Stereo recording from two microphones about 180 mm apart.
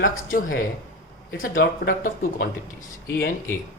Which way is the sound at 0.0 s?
50° left (ahead or behind).